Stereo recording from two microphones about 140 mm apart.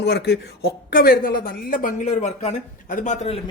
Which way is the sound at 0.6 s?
90° left.